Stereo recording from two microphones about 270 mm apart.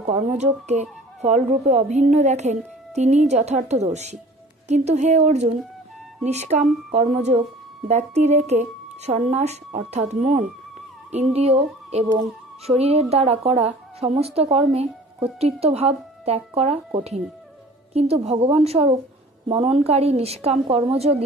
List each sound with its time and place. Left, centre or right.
0.0 s speech: right